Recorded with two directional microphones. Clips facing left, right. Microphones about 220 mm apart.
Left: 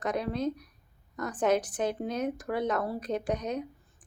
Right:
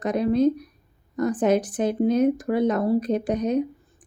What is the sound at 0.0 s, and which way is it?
Speech, 15° right (ahead or behind).